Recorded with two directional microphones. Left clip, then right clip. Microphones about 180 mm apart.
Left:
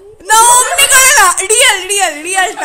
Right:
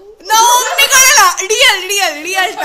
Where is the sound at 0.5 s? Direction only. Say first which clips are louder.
Left 1 dB; 25° left (ahead or behind).